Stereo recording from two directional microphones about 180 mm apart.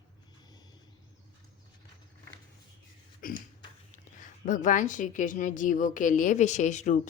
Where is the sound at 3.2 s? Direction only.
50° left (ahead or behind).